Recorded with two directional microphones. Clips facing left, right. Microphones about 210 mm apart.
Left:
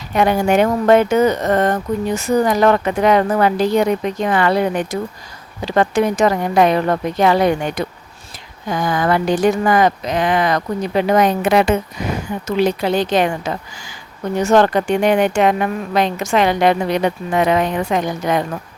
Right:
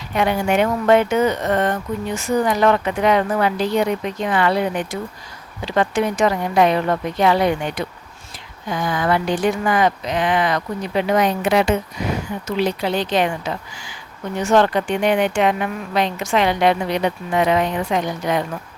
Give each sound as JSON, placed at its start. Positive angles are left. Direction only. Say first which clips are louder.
{"t": 0.2, "sound": "speech", "louder": "left 4 dB", "side_deg": 40}